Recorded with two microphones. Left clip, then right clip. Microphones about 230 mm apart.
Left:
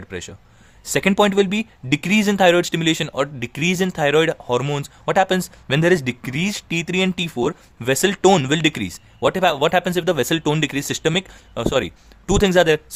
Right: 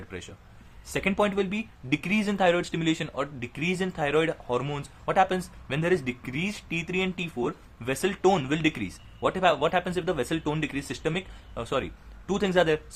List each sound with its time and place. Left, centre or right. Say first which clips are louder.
0.1 s speech: left 12 dB; left